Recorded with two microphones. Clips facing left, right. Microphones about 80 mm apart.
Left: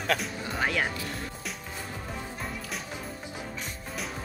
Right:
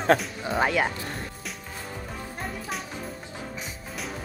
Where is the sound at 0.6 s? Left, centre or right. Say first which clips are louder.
Right 4 dB; centre.